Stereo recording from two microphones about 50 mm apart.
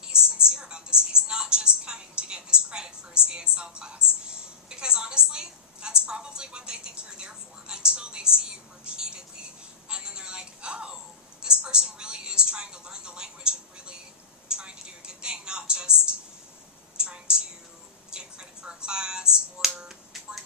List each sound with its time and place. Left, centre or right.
0.4 s music: centre
4.3 s a woman's voice: centre
9.9 s a sound: centre
19.8 s finger snapping: centre